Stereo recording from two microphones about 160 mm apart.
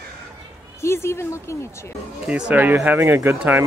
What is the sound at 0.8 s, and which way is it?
A woman's voice, 15° left (ahead or behind).